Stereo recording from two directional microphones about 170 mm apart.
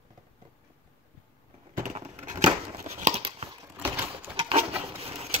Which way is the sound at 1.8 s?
45° right (ahead or behind).